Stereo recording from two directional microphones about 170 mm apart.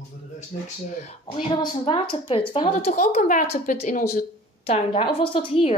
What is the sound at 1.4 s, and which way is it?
A woman's voice, 30° left (ahead or behind).